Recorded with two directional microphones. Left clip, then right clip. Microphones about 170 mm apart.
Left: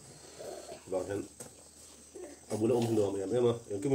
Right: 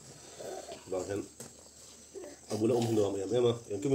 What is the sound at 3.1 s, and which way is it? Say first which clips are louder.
Speech: even; 10° right (ahead or behind).